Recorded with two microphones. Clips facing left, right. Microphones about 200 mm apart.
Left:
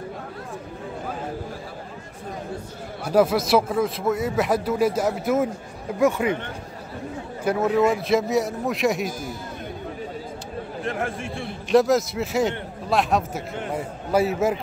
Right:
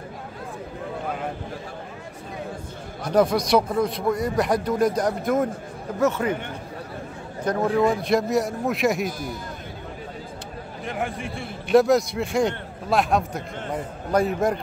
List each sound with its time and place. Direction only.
3.0 s a man's voice: 5° left (ahead or behind)
7.4 s a man's voice: 5° left (ahead or behind)
10.8 s a man's voice: centre (ahead or behind)